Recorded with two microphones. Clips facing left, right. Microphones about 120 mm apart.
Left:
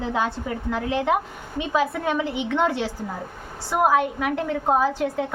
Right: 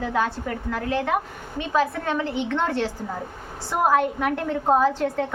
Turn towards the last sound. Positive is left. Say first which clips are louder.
# right 1 dB
turn(degrees=5)  # may be behind; listen again after turning